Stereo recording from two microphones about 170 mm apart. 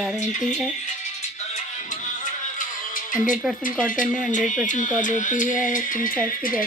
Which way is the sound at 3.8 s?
50° left (ahead or behind).